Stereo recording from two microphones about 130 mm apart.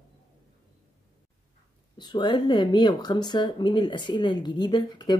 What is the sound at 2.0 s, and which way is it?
Speech, 35° left (ahead or behind).